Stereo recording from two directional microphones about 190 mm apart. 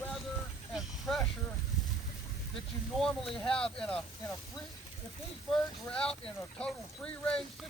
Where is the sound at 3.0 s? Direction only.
Centre (ahead or behind).